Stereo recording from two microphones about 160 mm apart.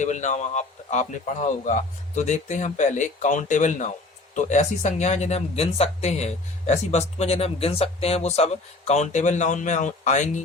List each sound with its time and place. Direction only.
0.0 s speech: 50° left (ahead or behind)